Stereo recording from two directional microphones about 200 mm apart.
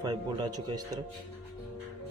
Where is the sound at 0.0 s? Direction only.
20° right (ahead or behind).